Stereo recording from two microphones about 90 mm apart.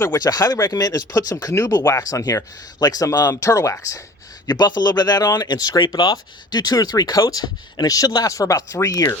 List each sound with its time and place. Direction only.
0.2 s speech: 45° left (ahead or behind)
4.4 s speech: 50° left (ahead or behind)